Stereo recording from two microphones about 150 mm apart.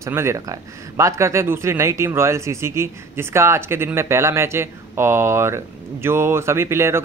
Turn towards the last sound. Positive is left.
turn(degrees=-15)  # may be behind; listen again after turning